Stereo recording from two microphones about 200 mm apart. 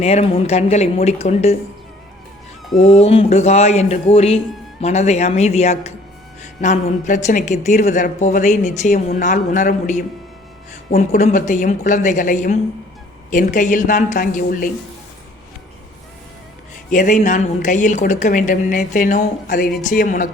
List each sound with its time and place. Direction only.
0.0 s speech: 30° left (ahead or behind)
2.8 s speech: 30° left (ahead or behind)
11.2 s speech: 35° left (ahead or behind)
16.9 s speech: 40° left (ahead or behind)